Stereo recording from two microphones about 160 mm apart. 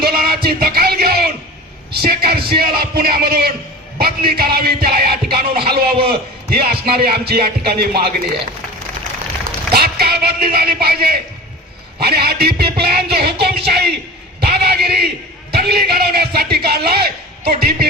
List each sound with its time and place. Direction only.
0.0 s music: 70° right (ahead or behind)
2.0 s a man's voice: 70° right (ahead or behind)
9.7 s music: 75° right (ahead or behind)
11.9 s a man's voice: 75° right (ahead or behind)
14.4 s a sound: 80° right
15.5 s a man's voice: 75° right (ahead or behind)